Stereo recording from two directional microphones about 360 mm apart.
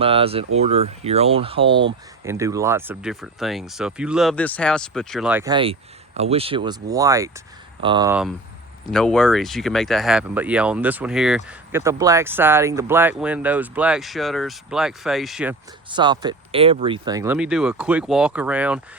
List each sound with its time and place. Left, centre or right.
0.0 s speech: centre
15.9 s speech: centre